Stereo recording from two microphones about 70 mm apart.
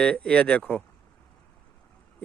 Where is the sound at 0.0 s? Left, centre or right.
Centre.